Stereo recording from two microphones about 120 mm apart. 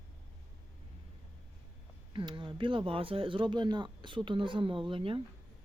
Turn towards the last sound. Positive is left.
turn(degrees=-45)  # may be behind; listen again after turning